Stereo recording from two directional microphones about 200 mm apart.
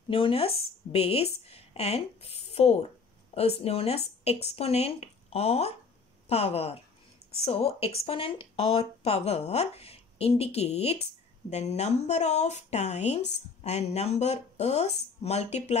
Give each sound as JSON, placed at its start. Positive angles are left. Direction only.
{"t": 0.1, "sound": "speech", "side_deg": 30}